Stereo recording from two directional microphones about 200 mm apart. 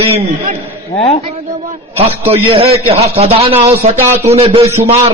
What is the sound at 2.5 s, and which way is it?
A man's voice, 30° right (ahead or behind).